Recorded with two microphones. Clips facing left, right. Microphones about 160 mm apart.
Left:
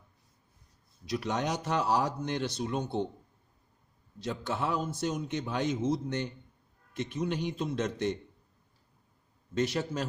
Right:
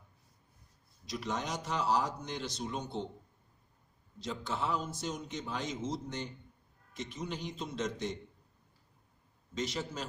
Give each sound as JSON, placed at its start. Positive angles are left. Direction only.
{"t": 1.0, "sound": "a man's voice", "side_deg": 60}
{"t": 4.2, "sound": "a man's voice", "side_deg": 60}
{"t": 9.6, "sound": "a man's voice", "side_deg": 60}